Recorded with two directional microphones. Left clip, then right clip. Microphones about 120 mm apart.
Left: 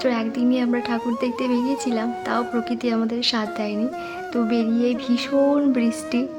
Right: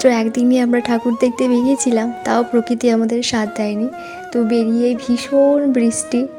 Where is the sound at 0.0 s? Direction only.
55° right (ahead or behind).